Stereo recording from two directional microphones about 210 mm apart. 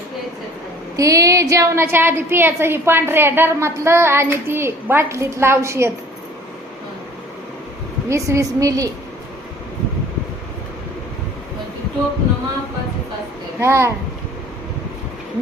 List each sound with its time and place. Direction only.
0.9 s a woman's voice: 15° right (ahead or behind)
8.1 s a woman's voice: 15° right (ahead or behind)
13.6 s a woman's voice: 10° right (ahead or behind)